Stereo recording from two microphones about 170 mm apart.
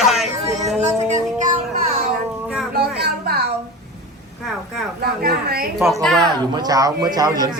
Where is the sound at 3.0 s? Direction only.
70° right (ahead or behind).